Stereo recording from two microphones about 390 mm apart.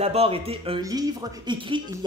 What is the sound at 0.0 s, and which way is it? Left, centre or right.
A woman's voice, centre.